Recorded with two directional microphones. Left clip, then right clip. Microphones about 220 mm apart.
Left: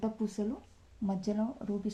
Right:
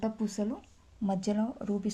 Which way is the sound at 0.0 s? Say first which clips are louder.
Right 2 dB; 35° right (ahead or behind).